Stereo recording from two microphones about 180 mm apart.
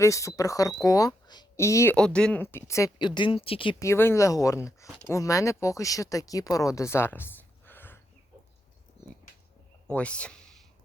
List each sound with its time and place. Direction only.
0.0 s speech: 15° left (ahead or behind)
2.0 s speech: 5° left (ahead or behind)
3.2 s speech: 30° left (ahead or behind)
3.8 s speech: 15° left (ahead or behind)
9.9 s speech: 5° left (ahead or behind)